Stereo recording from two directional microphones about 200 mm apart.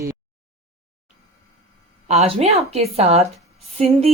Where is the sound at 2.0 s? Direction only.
30° right (ahead or behind).